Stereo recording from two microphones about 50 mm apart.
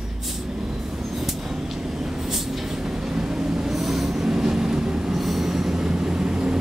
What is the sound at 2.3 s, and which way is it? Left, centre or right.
Vehicle, centre.